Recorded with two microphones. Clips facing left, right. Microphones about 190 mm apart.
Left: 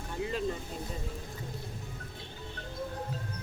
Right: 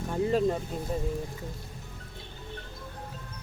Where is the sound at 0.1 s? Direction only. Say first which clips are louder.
Right 8 dB; 45° right (ahead or behind).